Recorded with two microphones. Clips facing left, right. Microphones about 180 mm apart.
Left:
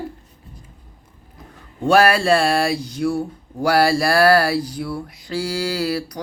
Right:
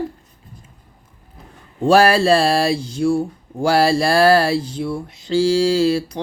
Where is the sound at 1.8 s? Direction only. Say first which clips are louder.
Right 2 dB; 30° right (ahead or behind).